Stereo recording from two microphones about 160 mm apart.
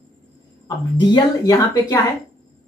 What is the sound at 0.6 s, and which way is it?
Speech, 30° left (ahead or behind).